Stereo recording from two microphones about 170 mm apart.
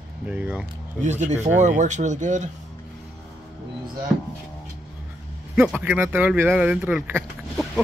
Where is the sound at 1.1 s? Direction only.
45° right (ahead or behind).